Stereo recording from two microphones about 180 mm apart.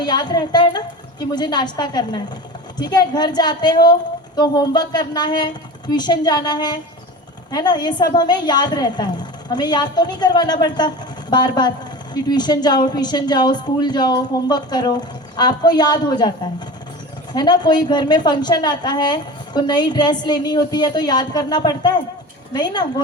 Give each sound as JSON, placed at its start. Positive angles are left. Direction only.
{"t": 0.0, "sound": "a woman's voice", "side_deg": 25}
{"t": 17.3, "sound": "a woman's voice", "side_deg": 25}